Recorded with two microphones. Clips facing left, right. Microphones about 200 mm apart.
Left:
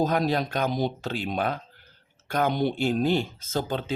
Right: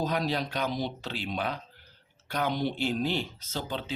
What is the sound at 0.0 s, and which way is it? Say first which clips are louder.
Speech: left 5 dB; 45° left (ahead or behind).